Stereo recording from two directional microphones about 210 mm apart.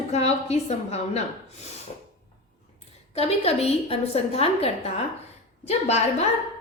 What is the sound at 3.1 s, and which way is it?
A woman's voice, 30° left (ahead or behind).